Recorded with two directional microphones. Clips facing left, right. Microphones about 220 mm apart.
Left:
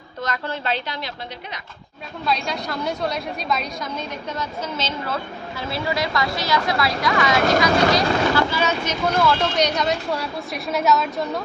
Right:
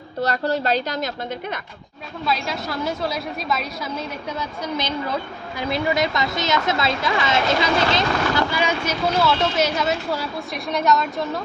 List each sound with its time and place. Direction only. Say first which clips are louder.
0.2 s a woman's voice: right 6 dB; 35° right (ahead or behind)
2.2 s a woman's voice: even; centre (ahead or behind)